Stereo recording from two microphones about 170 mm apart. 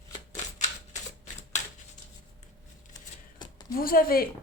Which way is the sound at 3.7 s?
60° left (ahead or behind).